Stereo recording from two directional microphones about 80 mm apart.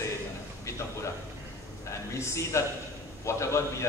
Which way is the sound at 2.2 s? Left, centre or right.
Left.